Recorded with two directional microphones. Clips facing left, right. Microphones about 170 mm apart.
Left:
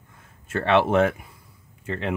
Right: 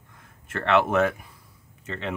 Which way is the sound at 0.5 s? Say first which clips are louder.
Left 2 dB; 30° left (ahead or behind).